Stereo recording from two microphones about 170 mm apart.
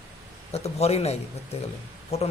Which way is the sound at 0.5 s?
40° left (ahead or behind).